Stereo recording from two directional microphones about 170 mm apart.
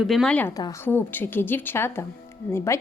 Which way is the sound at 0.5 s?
20° left (ahead or behind).